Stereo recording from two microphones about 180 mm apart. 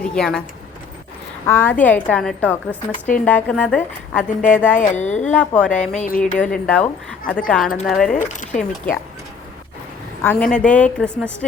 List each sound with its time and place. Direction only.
0.0 s a woman's voice: 5° left (ahead or behind)
1.5 s a woman's voice: 15° left (ahead or behind)
4.4 s speech: 45° left (ahead or behind)
5.2 s a woman's voice: 5° left (ahead or behind)
6.1 s speech: 50° left (ahead or behind)
6.3 s a woman's voice: 5° left (ahead or behind)
8.1 s speech: 45° left (ahead or behind)
10.2 s a woman's voice: 5° left (ahead or behind)